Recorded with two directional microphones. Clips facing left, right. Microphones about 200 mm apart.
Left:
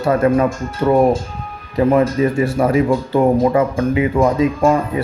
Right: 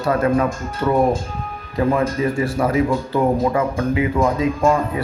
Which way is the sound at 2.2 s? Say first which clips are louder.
Left 4 dB; 25° left (ahead or behind).